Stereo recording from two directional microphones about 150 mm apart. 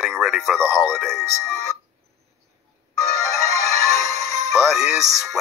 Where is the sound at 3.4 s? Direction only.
50° right (ahead or behind).